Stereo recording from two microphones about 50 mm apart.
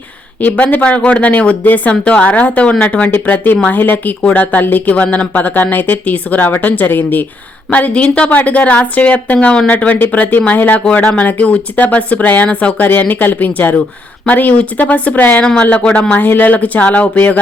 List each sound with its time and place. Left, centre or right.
0.4 s a woman's voice: left
1.9 s a woman's voice: left
3.1 s a woman's voice: left
9.7 s speech: left
15.4 s a woman's voice: left
16.1 s speech: left